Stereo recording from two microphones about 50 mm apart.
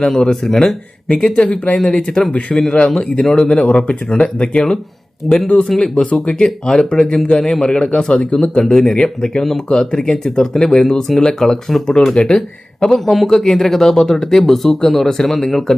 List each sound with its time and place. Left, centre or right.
0.0 s speech: centre
5.2 s speech: centre
5.8 s speech: centre
12.8 s speech: centre